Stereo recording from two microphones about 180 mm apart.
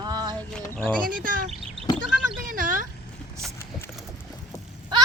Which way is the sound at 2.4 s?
50° right (ahead or behind).